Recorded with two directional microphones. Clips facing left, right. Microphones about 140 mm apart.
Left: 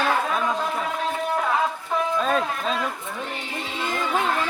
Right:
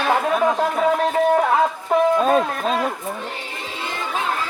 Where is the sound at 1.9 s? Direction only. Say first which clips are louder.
Right 9 dB; 65° right (ahead or behind).